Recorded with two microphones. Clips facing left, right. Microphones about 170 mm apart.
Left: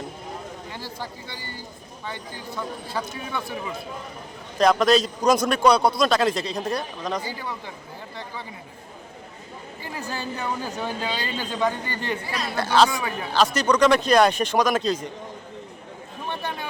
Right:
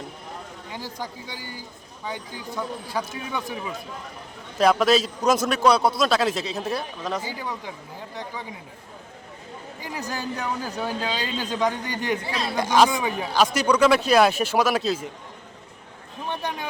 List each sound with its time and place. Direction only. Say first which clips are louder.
0.7 s a man's voice: right 5 dB; 15° right (ahead or behind)
4.5 s a man's voice: left 1 dB; 5° right (ahead or behind)
10.1 s a man's voice: even; 10° right (ahead or behind)
16.3 s speech: right 1 dB; 15° right (ahead or behind)